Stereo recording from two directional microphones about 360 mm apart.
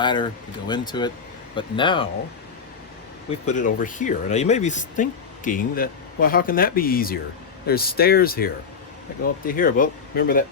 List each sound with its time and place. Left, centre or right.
0.0 s speech: centre
3.2 s speech: centre